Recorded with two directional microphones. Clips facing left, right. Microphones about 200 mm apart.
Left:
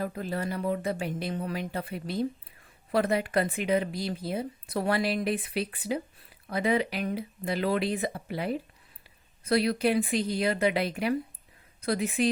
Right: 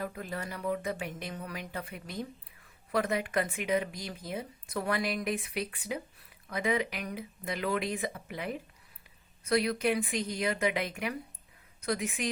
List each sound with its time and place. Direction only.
0.0 s a woman's voice: 30° left (ahead or behind)